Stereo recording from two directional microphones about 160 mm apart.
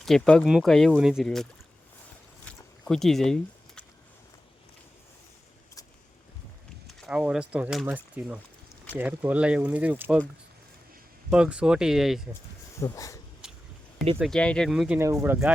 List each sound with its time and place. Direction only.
0.0 s speech: 5° left (ahead or behind)
2.4 s a sound: 10° left (ahead or behind)
7.0 s speech: 5° right (ahead or behind)
11.3 s speech: 5° right (ahead or behind)
12.8 s speech: 20° left (ahead or behind)
13.4 s a sound: 5° right (ahead or behind)
14.2 s speech: 5° left (ahead or behind)
15.0 s speech: 15° right (ahead or behind)